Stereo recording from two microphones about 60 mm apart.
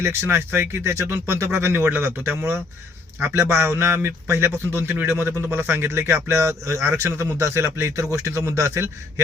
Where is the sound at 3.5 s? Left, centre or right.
Right.